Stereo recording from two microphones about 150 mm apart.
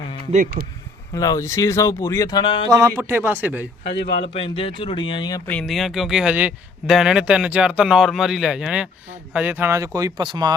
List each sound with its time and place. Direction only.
0.6 s speech: 35° right (ahead or behind)
1.1 s speech: 25° left (ahead or behind)
2.6 s speech: 20° right (ahead or behind)
4.4 s speech: 35° left (ahead or behind)
5.5 s speech: 5° left (ahead or behind); by 10.5 s 30° right (ahead or behind)